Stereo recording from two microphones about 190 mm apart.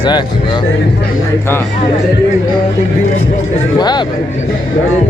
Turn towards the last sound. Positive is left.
turn(degrees=20)  # may be behind; listen again after turning